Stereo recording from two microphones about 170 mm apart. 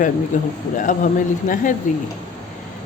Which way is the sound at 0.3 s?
50° left (ahead or behind).